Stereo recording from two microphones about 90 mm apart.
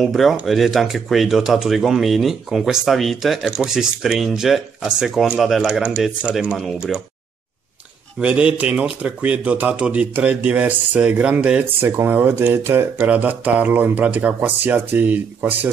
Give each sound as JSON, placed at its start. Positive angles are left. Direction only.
{"t": 0.0, "sound": "speech", "side_deg": 0}
{"t": 8.2, "sound": "speech", "side_deg": -15}
{"t": 11.6, "sound": "speech", "side_deg": -25}